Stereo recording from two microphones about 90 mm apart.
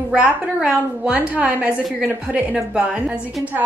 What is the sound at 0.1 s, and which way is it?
A woman's voice, 10° right (ahead or behind).